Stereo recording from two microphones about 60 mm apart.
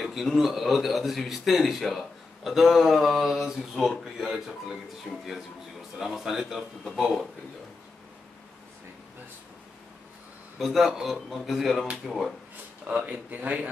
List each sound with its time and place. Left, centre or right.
0.0 s a man's voice: centre
10.6 s speech: centre
12.8 s speech: right